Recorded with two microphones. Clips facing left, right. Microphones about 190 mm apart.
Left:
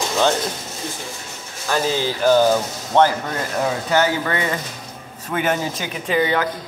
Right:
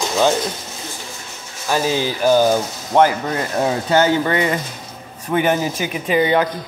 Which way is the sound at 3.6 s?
25° right (ahead or behind).